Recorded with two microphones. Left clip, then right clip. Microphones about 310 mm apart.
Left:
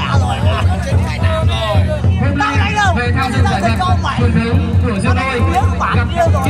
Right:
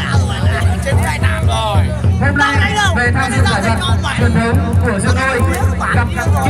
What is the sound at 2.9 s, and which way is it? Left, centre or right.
Music, right.